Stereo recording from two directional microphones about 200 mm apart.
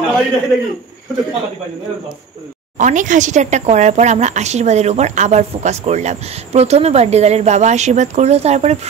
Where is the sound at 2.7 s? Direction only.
40° right (ahead or behind).